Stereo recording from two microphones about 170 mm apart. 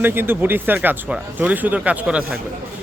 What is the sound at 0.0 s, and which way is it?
A man's voice, 10° right (ahead or behind).